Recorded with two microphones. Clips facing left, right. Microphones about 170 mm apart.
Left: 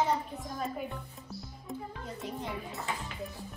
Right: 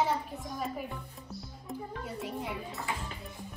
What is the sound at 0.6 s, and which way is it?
A child's voice, 5° right (ahead or behind).